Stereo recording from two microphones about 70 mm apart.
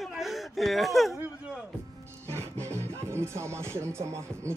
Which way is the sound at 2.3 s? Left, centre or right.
Right.